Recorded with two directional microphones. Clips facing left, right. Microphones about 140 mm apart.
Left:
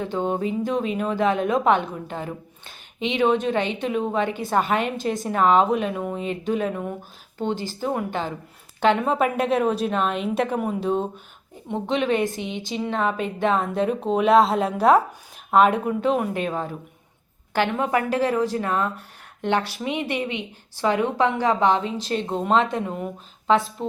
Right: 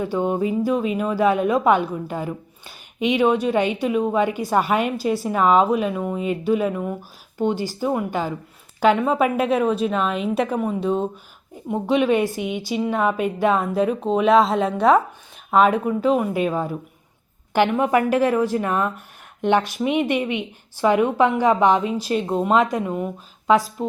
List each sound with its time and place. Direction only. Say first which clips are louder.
0.0 s a woman's voice: right 3 dB; 10° right (ahead or behind)